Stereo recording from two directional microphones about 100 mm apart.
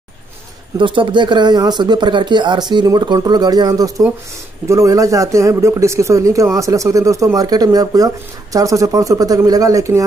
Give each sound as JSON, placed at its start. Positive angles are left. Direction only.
{"t": 0.7, "sound": "a man's voice", "side_deg": -55}